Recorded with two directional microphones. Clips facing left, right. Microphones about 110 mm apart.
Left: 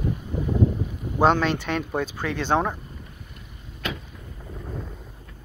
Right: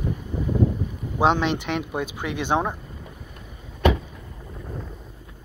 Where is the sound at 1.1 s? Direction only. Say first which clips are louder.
Left 1 dB; 15° right (ahead or behind).